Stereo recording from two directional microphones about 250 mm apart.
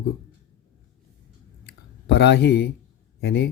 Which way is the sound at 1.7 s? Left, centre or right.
Left.